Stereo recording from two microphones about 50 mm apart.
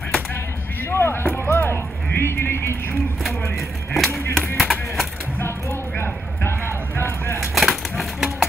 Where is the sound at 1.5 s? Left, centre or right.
Left.